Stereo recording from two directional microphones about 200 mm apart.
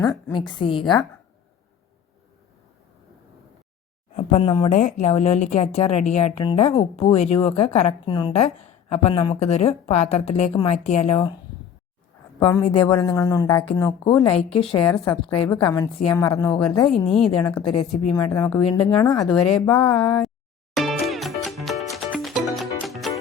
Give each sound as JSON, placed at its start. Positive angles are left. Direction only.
{"t": 0.3, "sound": "speech", "side_deg": 20}
{"t": 4.1, "sound": "speech", "side_deg": 35}
{"t": 12.5, "sound": "speech", "side_deg": 20}
{"t": 17.1, "sound": "speech", "side_deg": 0}
{"t": 17.6, "sound": "speech", "side_deg": 30}
{"t": 19.3, "sound": "speech", "side_deg": 0}
{"t": 20.7, "sound": "music", "side_deg": 0}